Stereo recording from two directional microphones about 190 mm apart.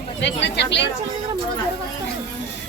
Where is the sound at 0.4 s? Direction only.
65° left (ahead or behind).